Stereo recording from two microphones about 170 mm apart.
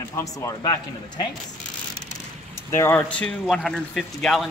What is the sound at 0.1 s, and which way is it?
Speech, 20° left (ahead or behind).